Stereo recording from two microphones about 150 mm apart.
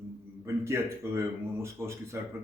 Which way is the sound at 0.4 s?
20° right (ahead or behind).